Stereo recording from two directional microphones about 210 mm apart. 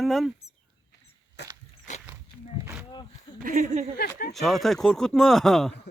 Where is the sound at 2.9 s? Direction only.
20° left (ahead or behind).